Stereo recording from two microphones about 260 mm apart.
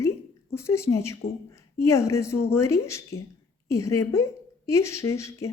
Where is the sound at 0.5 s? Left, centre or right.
Centre.